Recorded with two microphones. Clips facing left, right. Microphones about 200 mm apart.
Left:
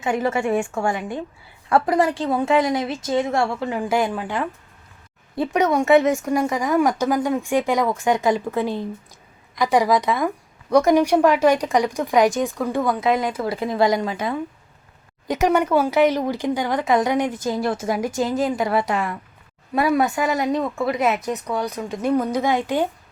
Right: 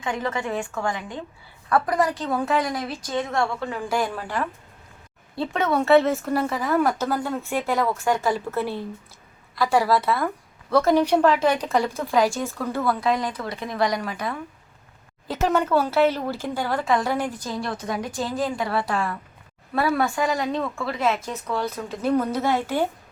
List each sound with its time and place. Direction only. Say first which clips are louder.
0.7 s a woman's voice: left 4 dB; 25° left (ahead or behind)
0.9 s a woman's voice: left 6 dB; 10° left (ahead or behind)
1.7 s a woman's voice: left 3 dB; 25° left (ahead or behind)
15.3 s a woman's voice: left 3 dB; 15° left (ahead or behind)